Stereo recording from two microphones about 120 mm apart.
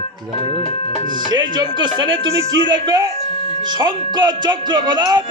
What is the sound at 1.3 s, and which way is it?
Speech, 40° right (ahead or behind).